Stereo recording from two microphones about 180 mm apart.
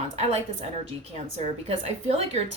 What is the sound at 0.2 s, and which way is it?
Speech, 35° right (ahead or behind).